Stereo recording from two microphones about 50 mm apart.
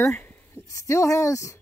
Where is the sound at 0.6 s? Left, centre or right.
Left.